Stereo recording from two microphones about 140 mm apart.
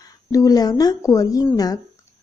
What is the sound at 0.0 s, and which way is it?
A woman's voice, 25° left (ahead or behind).